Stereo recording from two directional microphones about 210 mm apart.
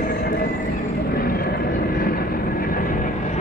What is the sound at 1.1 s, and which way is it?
Vehicle, 45° left (ahead or behind).